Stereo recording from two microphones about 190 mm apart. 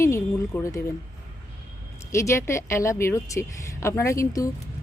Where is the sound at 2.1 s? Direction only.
15° left (ahead or behind).